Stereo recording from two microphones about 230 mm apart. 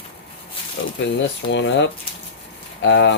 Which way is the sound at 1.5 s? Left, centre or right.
Left.